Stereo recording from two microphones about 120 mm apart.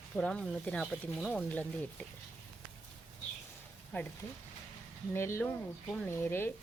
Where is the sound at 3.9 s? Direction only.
15° left (ahead or behind).